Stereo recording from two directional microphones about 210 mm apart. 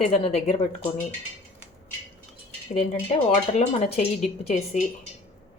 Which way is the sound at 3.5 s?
30° left (ahead or behind).